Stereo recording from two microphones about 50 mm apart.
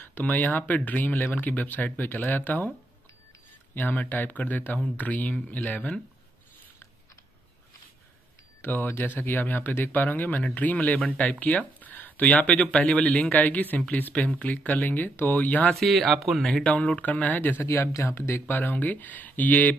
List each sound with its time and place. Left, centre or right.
0.0 s speech: left
2.0 s speech: left
3.7 s speech: left
8.5 s speech: left
15.7 s speech: centre
16.4 s speech: centre
16.7 s speech: left
17.6 s speech: left
18.6 s speech: left